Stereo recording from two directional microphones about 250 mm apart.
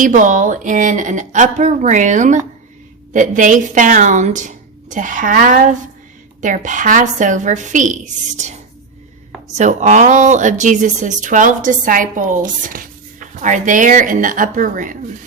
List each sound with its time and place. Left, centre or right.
0.0 s a woman's voice: right
9.6 s speech: right